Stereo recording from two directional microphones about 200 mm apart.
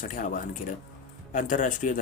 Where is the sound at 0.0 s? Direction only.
40° left (ahead or behind).